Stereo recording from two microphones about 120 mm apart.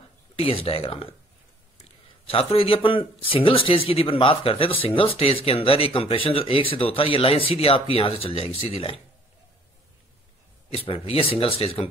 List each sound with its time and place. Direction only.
0.4 s speech: 55° left (ahead or behind)
2.2 s speech: 50° left (ahead or behind)
10.9 s speech: 50° left (ahead or behind)